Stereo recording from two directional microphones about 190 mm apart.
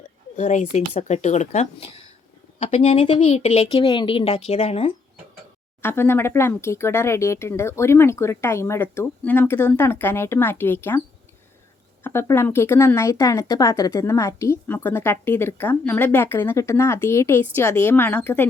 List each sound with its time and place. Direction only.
0.3 s speech: 40° left (ahead or behind)
5.8 s speech: 10° left (ahead or behind)
12.0 s speech: 10° left (ahead or behind)